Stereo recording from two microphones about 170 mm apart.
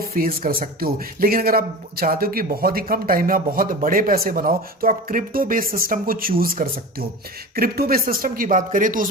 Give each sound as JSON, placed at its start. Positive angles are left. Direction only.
{"t": 0.1, "sound": "speech", "side_deg": -60}